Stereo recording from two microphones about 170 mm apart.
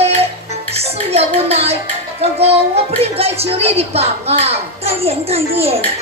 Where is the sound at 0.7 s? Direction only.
35° right (ahead or behind).